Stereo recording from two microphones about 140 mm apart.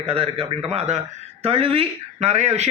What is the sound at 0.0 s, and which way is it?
A man's voice, 45° right (ahead or behind).